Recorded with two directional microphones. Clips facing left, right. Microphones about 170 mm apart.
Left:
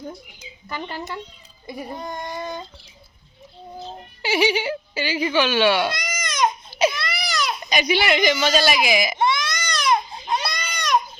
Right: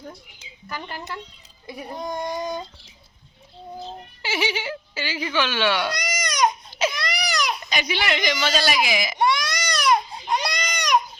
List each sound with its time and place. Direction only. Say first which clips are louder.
0.7 s speech: left 3 dB; 20° left (ahead or behind)
1.6 s speech: left 2 dB; centre (ahead or behind)
2.0 s speech: right 7 dB; 15° right (ahead or behind)
4.2 s speech: left 6 dB; 15° left (ahead or behind)
6.1 s crying: right 1 dB; 10° right (ahead or behind)
6.7 s baby cry: left 5 dB; 10° left (ahead or behind)
7.0 s baby cry: even; 15° right (ahead or behind)
7.6 s speech: left 5 dB; 15° left (ahead or behind)
9.1 s baby cry: even; 10° right (ahead or behind)